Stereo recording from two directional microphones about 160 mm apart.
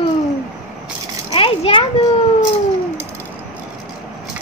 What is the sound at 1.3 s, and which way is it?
Speech, 35° left (ahead or behind).